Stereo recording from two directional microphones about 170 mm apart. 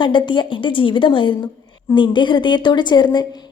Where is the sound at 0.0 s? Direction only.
30° left (ahead or behind).